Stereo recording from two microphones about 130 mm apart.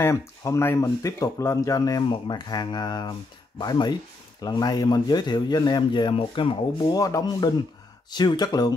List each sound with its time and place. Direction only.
0.0 s speech: 25° left (ahead or behind)